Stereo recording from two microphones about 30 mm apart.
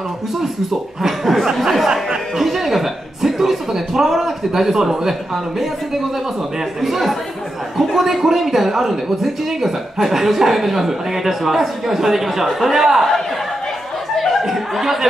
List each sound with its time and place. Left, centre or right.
0.7 s speech: centre
2.4 s speech: centre
14.1 s chuckle: centre
14.4 s a sound: centre